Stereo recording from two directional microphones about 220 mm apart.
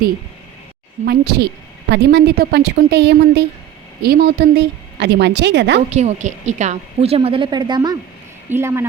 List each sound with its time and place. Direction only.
1.0 s a woman's voice: 45° right (ahead or behind)
5.9 s a woman's voice: 30° right (ahead or behind); by 8.9 s 10° right (ahead or behind)